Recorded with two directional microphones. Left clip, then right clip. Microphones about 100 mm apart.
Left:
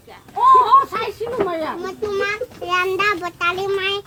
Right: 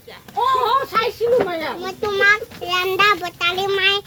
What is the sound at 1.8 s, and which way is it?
A child's voice, 10° left (ahead or behind).